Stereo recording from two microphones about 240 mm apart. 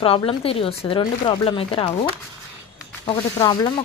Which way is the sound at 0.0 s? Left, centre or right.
Left.